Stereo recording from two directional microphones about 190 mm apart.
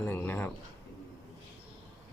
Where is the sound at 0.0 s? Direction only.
10° left (ahead or behind).